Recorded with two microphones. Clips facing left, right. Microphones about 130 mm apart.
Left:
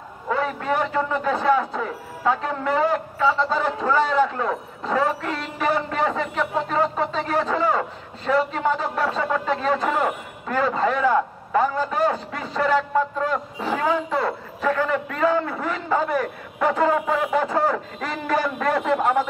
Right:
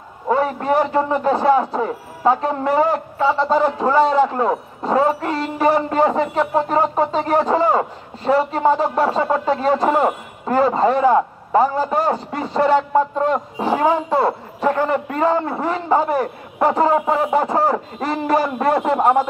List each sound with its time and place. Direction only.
0.3 s speech: 35° right (ahead or behind)